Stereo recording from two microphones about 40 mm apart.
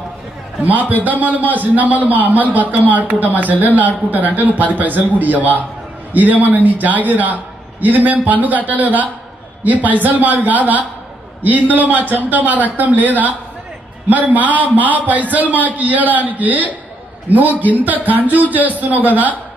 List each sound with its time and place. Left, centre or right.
0.6 s a man's voice: right